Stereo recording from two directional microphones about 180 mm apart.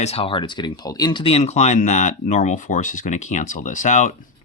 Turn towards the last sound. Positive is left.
turn(degrees=40)  # may be behind; listen again after turning